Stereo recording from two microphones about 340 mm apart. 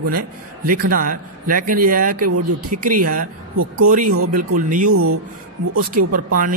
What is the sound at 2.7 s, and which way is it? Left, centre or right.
Speech, right.